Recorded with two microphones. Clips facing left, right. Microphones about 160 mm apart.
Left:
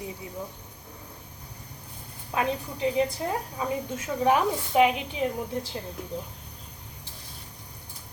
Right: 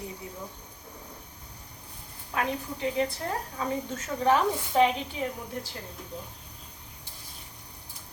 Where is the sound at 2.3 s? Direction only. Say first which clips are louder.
Left 2 dB; 20° left (ahead or behind).